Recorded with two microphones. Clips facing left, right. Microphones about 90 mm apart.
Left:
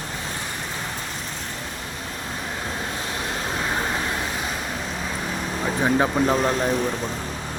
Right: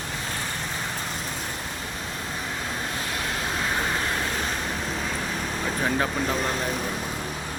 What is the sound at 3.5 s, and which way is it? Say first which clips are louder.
Vehicle: left 1 dB; 10° left (ahead or behind).